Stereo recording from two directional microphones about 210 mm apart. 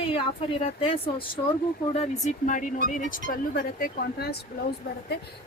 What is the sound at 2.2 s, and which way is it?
Speech, 40° left (ahead or behind).